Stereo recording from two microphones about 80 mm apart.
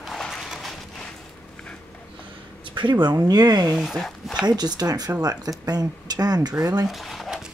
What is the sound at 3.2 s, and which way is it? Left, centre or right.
Speech, right.